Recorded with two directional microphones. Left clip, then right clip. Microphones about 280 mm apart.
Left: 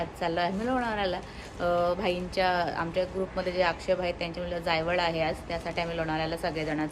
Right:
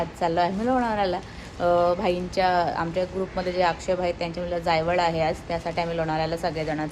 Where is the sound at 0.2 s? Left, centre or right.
Centre.